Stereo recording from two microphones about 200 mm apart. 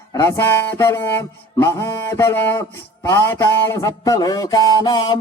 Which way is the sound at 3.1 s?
15° left (ahead or behind).